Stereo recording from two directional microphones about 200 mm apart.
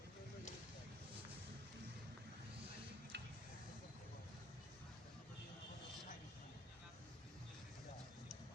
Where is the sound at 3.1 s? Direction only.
55° right (ahead or behind).